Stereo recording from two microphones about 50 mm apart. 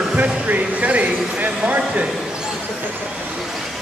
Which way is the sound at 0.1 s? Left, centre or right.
Right.